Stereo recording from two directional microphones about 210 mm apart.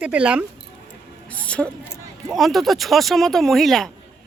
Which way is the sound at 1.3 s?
5° left (ahead or behind).